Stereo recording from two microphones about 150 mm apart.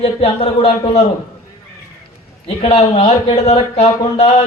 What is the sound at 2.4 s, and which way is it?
A man's voice, 40° left (ahead or behind).